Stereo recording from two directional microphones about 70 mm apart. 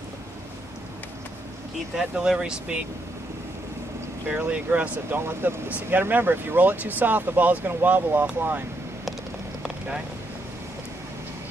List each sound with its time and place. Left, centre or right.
2.0 s speech: centre
4.3 s speech: right